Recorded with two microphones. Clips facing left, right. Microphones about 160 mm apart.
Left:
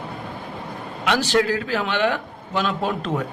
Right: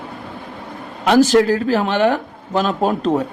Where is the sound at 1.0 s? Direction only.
45° right (ahead or behind).